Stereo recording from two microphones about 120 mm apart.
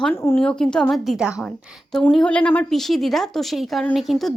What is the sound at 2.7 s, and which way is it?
Speech, centre (ahead or behind).